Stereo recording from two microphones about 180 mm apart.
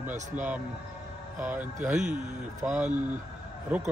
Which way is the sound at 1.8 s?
45° right (ahead or behind).